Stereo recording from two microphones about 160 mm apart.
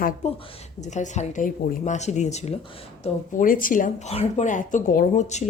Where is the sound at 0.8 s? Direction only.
50° left (ahead or behind).